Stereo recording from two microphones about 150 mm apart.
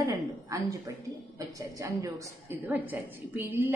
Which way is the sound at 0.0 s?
20° right (ahead or behind).